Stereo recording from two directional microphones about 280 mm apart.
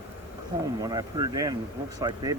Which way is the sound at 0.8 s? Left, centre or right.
Centre.